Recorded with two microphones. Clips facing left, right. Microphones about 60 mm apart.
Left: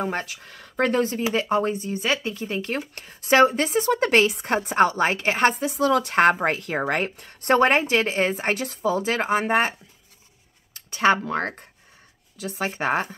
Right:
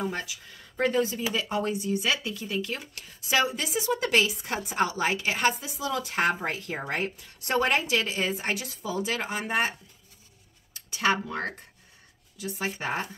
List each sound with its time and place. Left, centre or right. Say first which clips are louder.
0.0 s speech: left 4 dB; left
1.3 s speech: left 6 dB; left
5.5 s speech: left 10 dB; left
7.2 s speech: left 8 dB; left